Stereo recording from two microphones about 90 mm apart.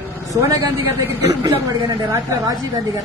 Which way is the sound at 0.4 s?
35° right (ahead or behind).